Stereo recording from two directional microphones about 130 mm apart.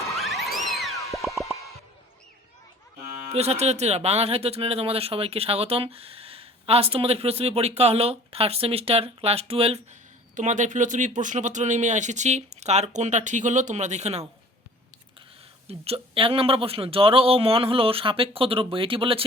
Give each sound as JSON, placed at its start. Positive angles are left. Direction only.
{"t": 0.2, "sound": "music", "side_deg": 0}
{"t": 3.2, "sound": "speech", "side_deg": -55}
{"t": 10.3, "sound": "speech", "side_deg": -75}
{"t": 15.6, "sound": "speech", "side_deg": -50}